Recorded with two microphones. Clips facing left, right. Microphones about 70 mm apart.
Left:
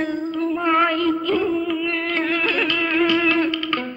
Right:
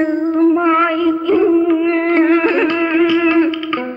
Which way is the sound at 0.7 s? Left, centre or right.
Centre.